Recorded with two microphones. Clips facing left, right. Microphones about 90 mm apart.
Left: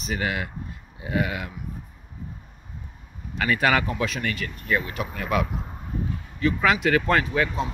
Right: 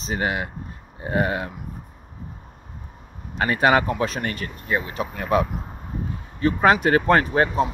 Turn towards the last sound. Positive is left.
turn(degrees=-40)  # may be behind; listen again after turning